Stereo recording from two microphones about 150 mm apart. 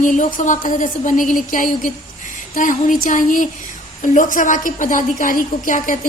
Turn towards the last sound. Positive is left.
turn(degrees=60)  # may be behind; listen again after turning